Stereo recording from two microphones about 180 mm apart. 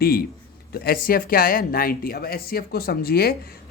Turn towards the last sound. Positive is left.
turn(degrees=55)  # may be behind; listen again after turning